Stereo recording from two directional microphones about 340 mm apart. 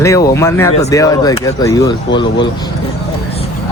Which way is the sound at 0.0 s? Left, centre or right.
Centre.